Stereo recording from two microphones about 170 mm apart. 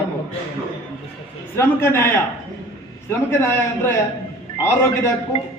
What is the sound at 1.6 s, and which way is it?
A man's voice, 15° left (ahead or behind).